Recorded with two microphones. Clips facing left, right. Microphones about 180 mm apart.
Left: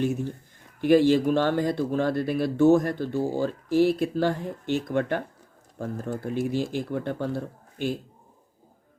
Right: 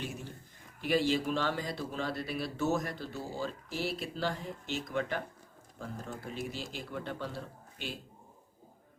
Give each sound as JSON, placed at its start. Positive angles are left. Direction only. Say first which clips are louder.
{"t": 0.0, "sound": "speech", "louder": "left 14 dB", "side_deg": 45}